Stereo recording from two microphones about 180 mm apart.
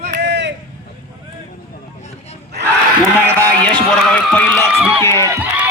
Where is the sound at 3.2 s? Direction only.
10° left (ahead or behind).